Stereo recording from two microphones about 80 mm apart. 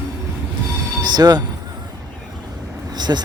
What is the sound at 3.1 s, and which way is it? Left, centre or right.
Speech, right.